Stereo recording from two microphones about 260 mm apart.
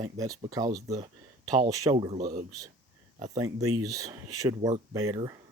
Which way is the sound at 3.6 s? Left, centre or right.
Right.